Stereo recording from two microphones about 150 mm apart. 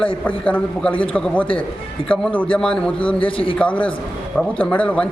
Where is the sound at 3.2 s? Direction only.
35° left (ahead or behind).